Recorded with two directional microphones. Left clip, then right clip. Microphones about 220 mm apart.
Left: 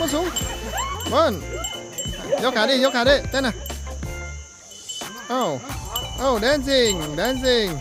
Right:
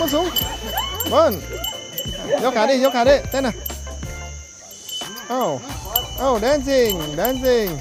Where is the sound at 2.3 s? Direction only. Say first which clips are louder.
Right 2 dB; 5° left (ahead or behind).